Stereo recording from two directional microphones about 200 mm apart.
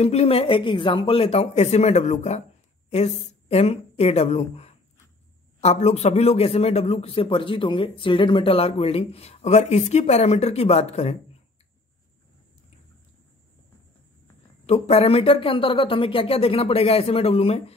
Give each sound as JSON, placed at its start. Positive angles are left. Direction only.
{"t": 0.0, "sound": "a man's voice", "side_deg": 30}
{"t": 14.7, "sound": "speech", "side_deg": 30}